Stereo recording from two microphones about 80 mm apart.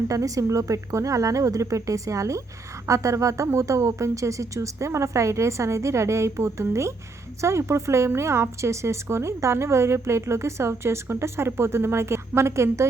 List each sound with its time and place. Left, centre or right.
0.1 s a woman's voice: right